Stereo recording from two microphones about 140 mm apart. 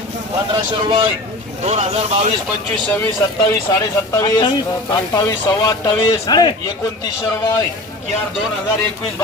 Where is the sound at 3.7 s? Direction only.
30° left (ahead or behind).